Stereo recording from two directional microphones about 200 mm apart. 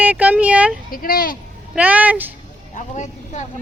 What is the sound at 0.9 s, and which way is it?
Speech, 45° left (ahead or behind).